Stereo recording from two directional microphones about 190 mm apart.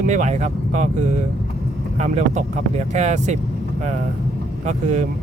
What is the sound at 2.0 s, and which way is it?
Speech, 35° right (ahead or behind).